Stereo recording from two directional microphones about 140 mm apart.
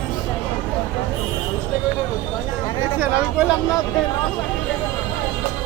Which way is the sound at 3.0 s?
10° right (ahead or behind).